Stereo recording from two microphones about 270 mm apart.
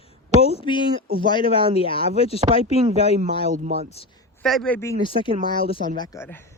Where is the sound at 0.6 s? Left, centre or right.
Centre.